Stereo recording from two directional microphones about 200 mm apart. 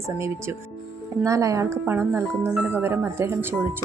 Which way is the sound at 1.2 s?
15° right (ahead or behind).